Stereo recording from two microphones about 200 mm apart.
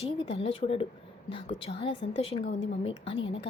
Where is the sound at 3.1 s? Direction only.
70° left (ahead or behind).